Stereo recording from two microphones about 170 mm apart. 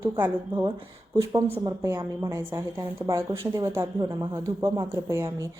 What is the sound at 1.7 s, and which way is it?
A woman's voice, 15° right (ahead or behind).